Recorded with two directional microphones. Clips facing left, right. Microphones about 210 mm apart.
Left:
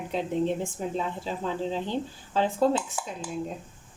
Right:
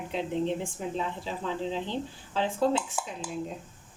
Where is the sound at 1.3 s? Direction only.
45° left (ahead or behind).